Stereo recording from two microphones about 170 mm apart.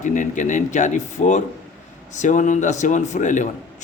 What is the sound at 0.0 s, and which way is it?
Speech, 50° left (ahead or behind).